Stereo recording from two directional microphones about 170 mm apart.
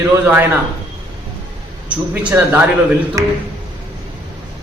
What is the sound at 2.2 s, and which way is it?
A man's voice, 10° right (ahead or behind).